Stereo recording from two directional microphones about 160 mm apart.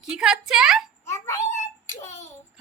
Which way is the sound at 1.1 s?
15° left (ahead or behind).